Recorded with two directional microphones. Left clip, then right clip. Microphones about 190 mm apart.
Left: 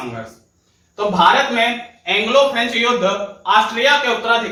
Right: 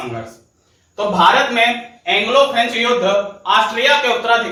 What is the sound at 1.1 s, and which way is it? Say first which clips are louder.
A man's voice: right 1 dB; 15° left (ahead or behind).